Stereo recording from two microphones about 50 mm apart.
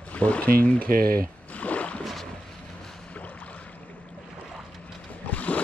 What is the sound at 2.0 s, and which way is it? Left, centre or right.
Boat, centre.